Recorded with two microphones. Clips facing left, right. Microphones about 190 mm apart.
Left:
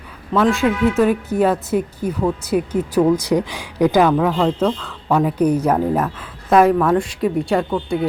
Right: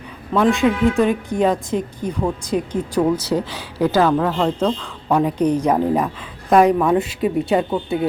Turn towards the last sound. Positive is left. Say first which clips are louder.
# even
turn(degrees=-20)  # may be behind; listen again after turning